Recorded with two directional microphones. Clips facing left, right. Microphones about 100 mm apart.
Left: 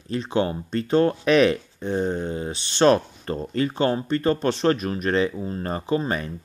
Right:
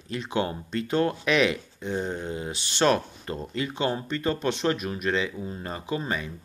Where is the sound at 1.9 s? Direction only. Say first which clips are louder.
Left 5 dB; 25° left (ahead or behind).